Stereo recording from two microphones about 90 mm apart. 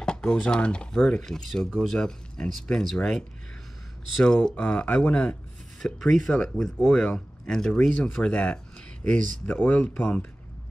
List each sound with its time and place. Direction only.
0.0 s speech: 10° left (ahead or behind)
5.9 s speech: 5° left (ahead or behind)